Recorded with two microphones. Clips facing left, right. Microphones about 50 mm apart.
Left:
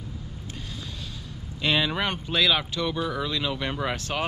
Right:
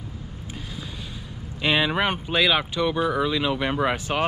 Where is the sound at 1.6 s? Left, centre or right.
Centre.